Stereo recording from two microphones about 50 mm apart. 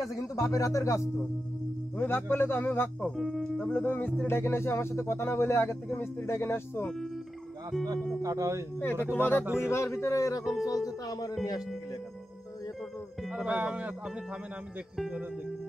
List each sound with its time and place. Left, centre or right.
0.1 s speech: left
2.0 s speech: left
3.2 s speech: centre
3.7 s music: left
4.3 s speech: left
7.7 s speech: centre
8.4 s speech: right
9.0 s speech: left
9.7 s speech: left
10.4 s speech: centre
13.5 s music: right